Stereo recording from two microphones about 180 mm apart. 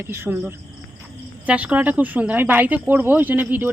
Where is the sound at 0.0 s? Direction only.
10° right (ahead or behind).